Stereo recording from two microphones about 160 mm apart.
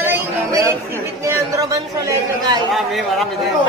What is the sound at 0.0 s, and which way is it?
Chatter, 15° right (ahead or behind).